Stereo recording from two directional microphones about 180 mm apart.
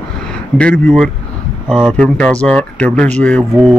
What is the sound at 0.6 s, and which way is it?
Speech, 5° left (ahead or behind).